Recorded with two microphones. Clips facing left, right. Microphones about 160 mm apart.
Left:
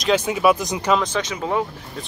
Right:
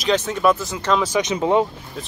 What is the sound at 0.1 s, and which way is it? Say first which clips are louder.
Speech: left 1 dB; 10° left (ahead or behind).